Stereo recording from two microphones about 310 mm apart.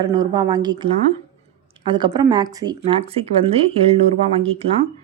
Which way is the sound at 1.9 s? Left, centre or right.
Centre.